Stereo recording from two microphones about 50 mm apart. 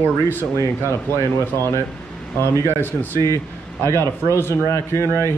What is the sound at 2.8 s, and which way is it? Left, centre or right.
Speech, left.